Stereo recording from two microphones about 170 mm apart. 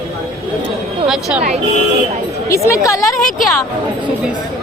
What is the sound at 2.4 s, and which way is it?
Speech, 15° left (ahead or behind).